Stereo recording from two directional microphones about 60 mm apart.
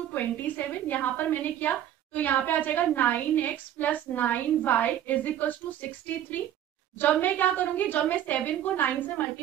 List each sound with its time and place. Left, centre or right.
0.1 s a woman's voice: left